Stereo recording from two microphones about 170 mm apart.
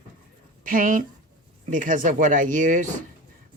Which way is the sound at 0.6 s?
55° right (ahead or behind).